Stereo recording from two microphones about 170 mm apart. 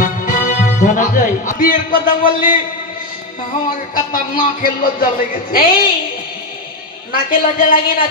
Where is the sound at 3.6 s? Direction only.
55° left (ahead or behind).